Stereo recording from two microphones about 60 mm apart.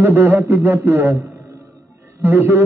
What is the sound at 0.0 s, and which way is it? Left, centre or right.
A man's voice, right.